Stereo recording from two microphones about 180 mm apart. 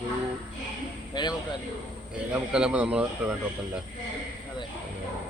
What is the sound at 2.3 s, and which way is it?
Speech, 5° right (ahead or behind).